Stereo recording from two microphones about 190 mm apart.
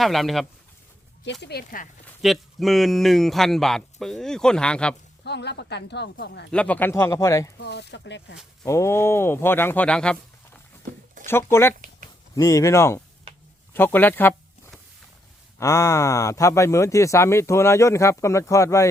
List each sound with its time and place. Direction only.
0.0 s speech: centre (ahead or behind)
1.2 s a woman's voice: 65° left (ahead or behind)
2.2 s speech: centre (ahead or behind)
5.2 s a woman's voice: 60° left (ahead or behind)
6.5 s speech: 5° left (ahead or behind)
7.6 s a woman's voice: 60° left (ahead or behind)
8.6 s speech: 15° left (ahead or behind)
15.5 s speech: 15° left (ahead or behind)